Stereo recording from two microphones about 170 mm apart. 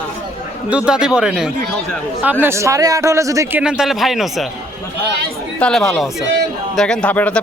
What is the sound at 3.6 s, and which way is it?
Speech, 5° right (ahead or behind).